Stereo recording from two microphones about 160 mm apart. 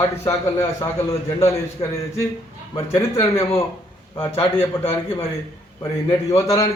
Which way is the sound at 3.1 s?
35° left (ahead or behind).